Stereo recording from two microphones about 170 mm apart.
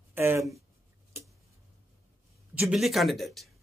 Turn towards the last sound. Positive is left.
turn(degrees=0)  # may be behind; listen again after turning